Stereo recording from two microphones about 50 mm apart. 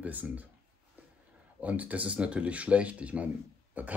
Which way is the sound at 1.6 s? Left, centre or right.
Right.